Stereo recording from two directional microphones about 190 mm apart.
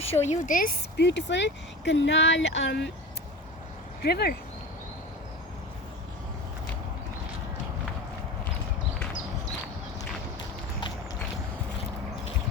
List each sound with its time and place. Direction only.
0.0 s speech: 35° left (ahead or behind)
1.0 s speech: 70° left (ahead or behind)
4.0 s speech: 55° left (ahead or behind)